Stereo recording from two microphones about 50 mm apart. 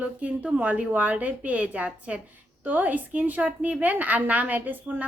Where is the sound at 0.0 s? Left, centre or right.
Right.